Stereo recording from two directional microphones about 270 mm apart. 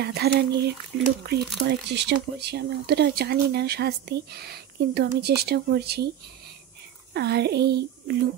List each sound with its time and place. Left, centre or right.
0.0 s speech: right
7.2 s speech: right